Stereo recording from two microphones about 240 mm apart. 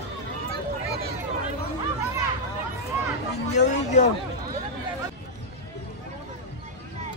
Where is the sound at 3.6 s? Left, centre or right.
Left.